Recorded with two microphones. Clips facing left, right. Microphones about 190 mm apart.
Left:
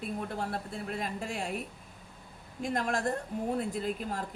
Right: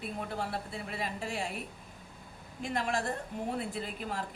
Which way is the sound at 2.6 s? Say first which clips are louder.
Left 2 dB; 45° left (ahead or behind).